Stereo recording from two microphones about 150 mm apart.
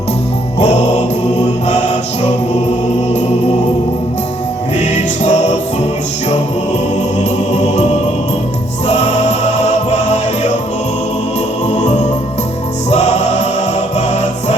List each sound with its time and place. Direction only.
0.6 s music: 50° left (ahead or behind)
4.8 s music: 50° left (ahead or behind)
7.2 s music: 50° left (ahead or behind)
8.9 s music: 50° left (ahead or behind)
11.7 s music: 50° left (ahead or behind)